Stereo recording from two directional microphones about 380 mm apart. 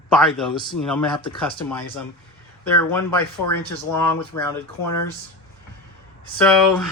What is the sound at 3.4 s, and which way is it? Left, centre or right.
Speech, left.